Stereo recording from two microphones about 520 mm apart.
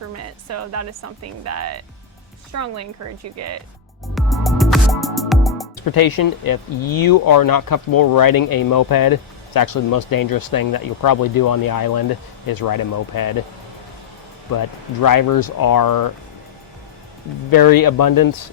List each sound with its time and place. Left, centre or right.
0.2 s speech: right
4.1 s music: centre
5.8 s speech: left
15.0 s speech: left
17.5 s speech: left